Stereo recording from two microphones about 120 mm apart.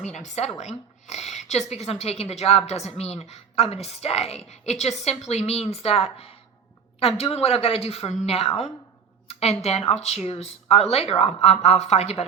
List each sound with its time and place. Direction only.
0.0 s a woman's voice: 75° left (ahead or behind); by 8.5 s 55° left (ahead or behind)
9.2 s a sound: 60° left (ahead or behind)
9.6 s a woman's voice: 60° left (ahead or behind)